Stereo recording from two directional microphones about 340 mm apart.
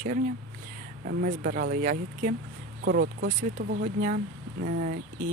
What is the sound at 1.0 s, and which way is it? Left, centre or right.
Speech, right.